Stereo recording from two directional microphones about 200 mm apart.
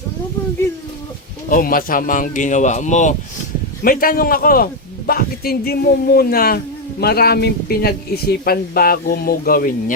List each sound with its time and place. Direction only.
1.5 s a man's voice: 45° left (ahead or behind)